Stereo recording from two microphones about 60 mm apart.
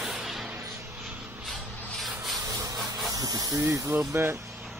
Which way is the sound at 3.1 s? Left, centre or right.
Right.